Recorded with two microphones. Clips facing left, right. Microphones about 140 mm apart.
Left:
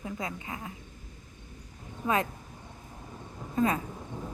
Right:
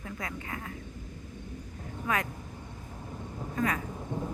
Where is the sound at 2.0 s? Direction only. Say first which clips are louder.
Left 3 dB; 25° left (ahead or behind).